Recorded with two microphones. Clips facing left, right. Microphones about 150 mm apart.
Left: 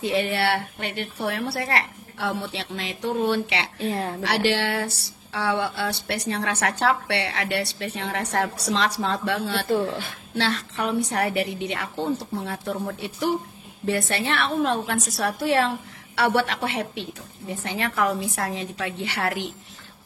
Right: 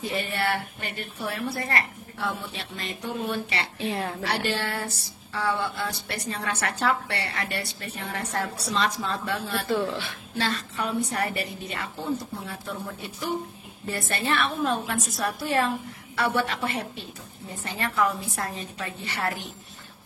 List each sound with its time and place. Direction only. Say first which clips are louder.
0.0 s speech: left 5 dB; 80° left
4.2 s speech: left 5 dB; 80° left
9.7 s speech: left 2 dB; 40° left (ahead or behind)
10.3 s a woman's voice: left 3 dB; 80° left
13.8 s a woman's voice: left 4 dB; 80° left